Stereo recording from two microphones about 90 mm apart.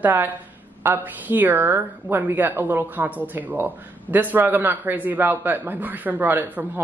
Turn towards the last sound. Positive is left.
turn(degrees=-20)  # may be behind; listen again after turning